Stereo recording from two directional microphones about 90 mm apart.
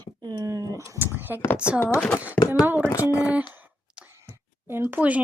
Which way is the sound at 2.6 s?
20° right (ahead or behind).